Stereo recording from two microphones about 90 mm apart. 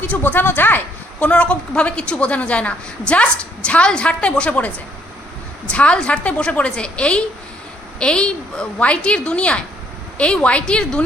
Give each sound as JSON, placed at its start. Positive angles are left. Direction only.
{"t": 0.0, "sound": "a woman's voice", "side_deg": 20}